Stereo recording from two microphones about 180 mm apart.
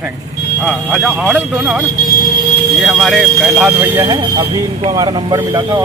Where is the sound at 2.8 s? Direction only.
Centre (ahead or behind).